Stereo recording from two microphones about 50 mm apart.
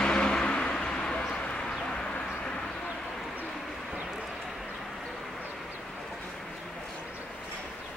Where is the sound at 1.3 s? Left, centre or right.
Left.